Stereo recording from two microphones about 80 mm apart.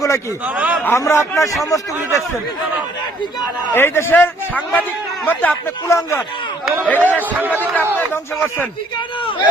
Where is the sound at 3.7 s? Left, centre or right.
Left.